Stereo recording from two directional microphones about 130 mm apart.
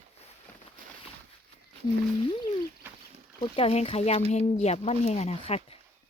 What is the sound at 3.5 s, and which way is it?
Speech, 50° left (ahead or behind).